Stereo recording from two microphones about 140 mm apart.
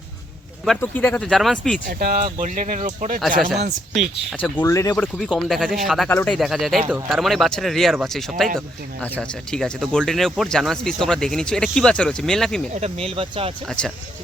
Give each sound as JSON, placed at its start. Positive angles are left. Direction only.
{"t": 0.8, "sound": "speech", "side_deg": 10}
{"t": 1.9, "sound": "speech", "side_deg": -90}
{"t": 2.4, "sound": "speech", "side_deg": -70}
{"t": 3.2, "sound": "speech", "side_deg": 0}
{"t": 4.4, "sound": "speech", "side_deg": 10}
{"t": 4.6, "sound": "speech", "side_deg": 20}
{"t": 4.9, "sound": "speech", "side_deg": 0}
{"t": 12.8, "sound": "speech", "side_deg": -45}
{"t": 13.7, "sound": "speech", "side_deg": 0}